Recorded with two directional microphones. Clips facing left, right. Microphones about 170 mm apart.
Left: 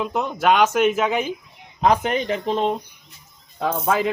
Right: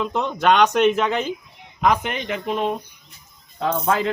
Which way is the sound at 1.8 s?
35° left (ahead or behind).